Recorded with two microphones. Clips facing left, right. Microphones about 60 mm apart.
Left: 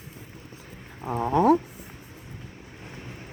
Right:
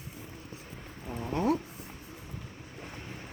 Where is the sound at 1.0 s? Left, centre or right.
Left.